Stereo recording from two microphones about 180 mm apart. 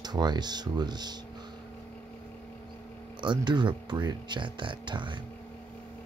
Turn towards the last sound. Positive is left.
turn(degrees=-25)  # may be behind; listen again after turning